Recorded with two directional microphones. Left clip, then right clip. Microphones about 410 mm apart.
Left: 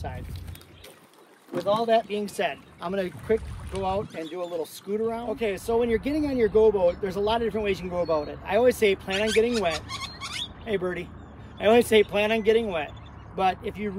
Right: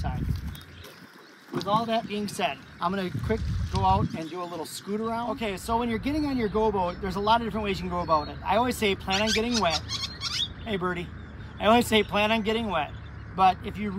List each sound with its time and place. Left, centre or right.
1.5 s speech: centre
9.5 s speech: centre
10.6 s speech: centre
11.5 s a sound: centre
11.9 s speech: centre